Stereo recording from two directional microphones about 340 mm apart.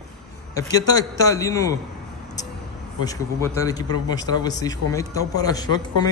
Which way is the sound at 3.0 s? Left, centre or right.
Centre.